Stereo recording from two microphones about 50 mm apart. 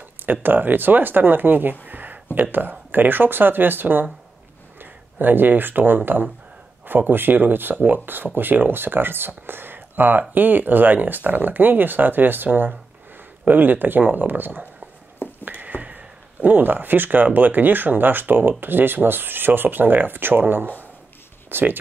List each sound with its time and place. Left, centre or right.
0.2 s speech: right
1.9 s a sound: right
2.3 s speech: right